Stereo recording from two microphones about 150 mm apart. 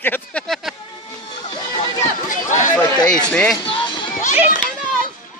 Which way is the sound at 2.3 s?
55° left (ahead or behind).